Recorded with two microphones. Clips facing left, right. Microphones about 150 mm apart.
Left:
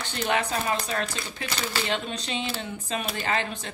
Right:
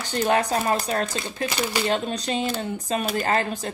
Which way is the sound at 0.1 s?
40° right (ahead or behind).